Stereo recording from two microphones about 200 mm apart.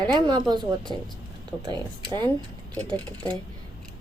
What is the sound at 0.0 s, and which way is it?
Speech, 20° right (ahead or behind).